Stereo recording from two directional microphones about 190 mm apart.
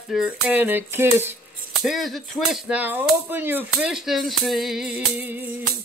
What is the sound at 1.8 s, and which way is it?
Speech, centre (ahead or behind).